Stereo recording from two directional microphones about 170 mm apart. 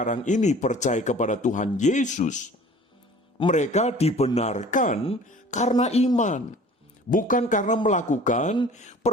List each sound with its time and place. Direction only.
0.0 s speech: 45° left (ahead or behind)
3.5 s a man's voice: 45° left (ahead or behind)